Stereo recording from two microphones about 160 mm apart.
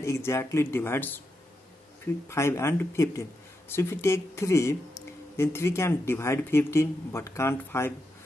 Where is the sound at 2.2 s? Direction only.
15° left (ahead or behind).